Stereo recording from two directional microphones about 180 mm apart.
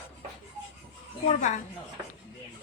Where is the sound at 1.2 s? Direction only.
40° left (ahead or behind).